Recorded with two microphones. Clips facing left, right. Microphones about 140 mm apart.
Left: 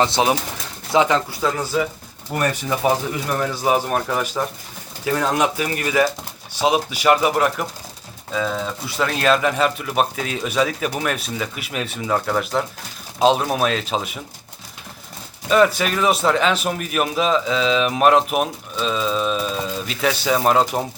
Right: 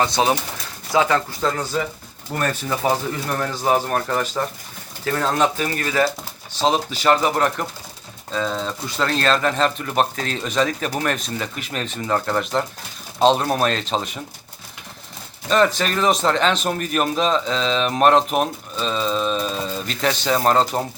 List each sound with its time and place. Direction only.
0.0 s speech: 20° left (ahead or behind)
1.4 s speech: 5° left (ahead or behind)
15.4 s speech: 10° left (ahead or behind)